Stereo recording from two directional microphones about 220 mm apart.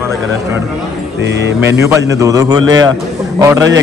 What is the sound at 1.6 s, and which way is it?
A man's voice, 10° right (ahead or behind).